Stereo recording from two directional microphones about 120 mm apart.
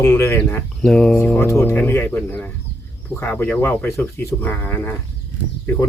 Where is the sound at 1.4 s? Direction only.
20° left (ahead or behind).